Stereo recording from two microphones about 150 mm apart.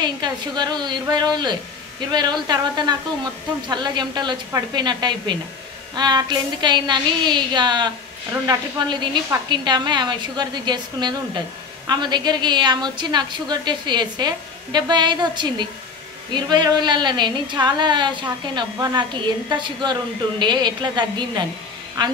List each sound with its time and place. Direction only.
0.0 s a woman's voice: 30° right (ahead or behind)